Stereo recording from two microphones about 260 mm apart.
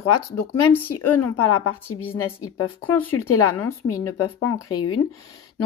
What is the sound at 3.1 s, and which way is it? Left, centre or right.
Speech, left.